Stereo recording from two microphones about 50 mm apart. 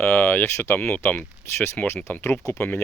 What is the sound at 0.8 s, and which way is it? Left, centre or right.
Speech, left.